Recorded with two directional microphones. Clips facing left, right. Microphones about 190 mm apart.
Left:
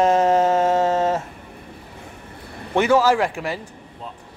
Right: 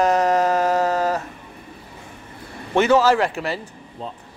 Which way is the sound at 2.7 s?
10° left (ahead or behind).